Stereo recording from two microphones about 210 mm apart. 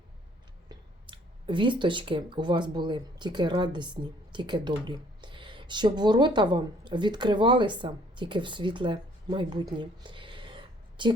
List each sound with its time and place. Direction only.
0.7 s speech: 25° right (ahead or behind)